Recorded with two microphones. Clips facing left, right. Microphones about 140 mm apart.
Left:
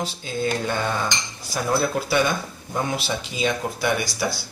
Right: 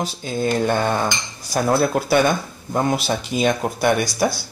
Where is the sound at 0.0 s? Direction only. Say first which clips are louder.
Right 3 dB; 50° right (ahead or behind).